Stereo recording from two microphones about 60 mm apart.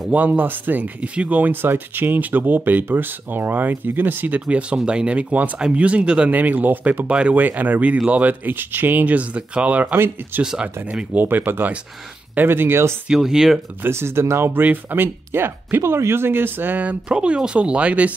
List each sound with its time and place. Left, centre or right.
0.1 s speech: right
1.4 s speech: right
4.5 s speech: centre
6.3 s speech: right
9.9 s speech: right
10.4 s speech: centre
11.1 s speech: right
13.1 s speech: centre
13.8 s speech: right
17.1 s speech: centre